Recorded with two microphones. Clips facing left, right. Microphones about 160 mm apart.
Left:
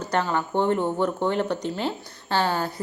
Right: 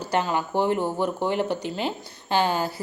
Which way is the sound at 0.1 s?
10° right (ahead or behind).